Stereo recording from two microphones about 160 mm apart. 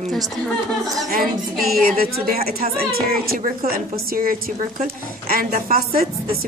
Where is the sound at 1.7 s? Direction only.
70° right (ahead or behind).